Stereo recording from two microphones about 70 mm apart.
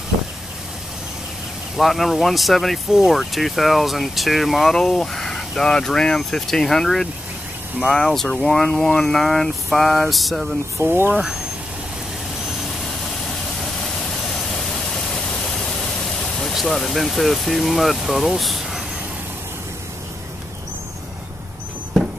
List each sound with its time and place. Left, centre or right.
1.8 s speech: centre
10.8 s speech: right
12.4 s vehicle: centre